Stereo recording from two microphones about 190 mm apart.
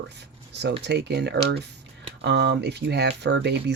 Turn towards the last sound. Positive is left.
turn(degrees=-65)  # may be behind; listen again after turning